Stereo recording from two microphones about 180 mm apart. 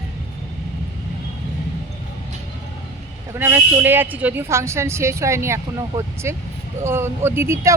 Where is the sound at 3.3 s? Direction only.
10° right (ahead or behind).